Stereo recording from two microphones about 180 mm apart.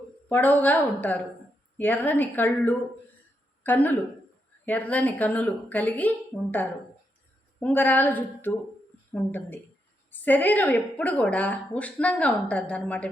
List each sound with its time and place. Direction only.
0.3 s a woman's voice: 10° left (ahead or behind)